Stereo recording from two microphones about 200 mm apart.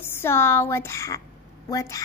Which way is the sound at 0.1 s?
10° left (ahead or behind).